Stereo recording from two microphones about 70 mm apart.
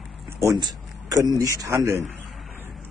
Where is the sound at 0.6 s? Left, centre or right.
Right.